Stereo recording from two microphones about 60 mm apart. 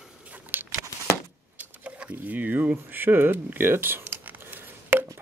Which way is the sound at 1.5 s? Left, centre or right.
Right.